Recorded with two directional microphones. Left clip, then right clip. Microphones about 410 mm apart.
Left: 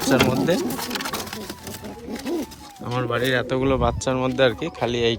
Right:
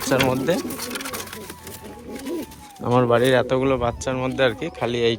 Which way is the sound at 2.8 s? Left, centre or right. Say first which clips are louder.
Right 6 dB; centre.